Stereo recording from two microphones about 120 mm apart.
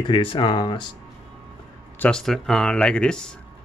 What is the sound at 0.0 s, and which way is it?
Speech, 45° left (ahead or behind).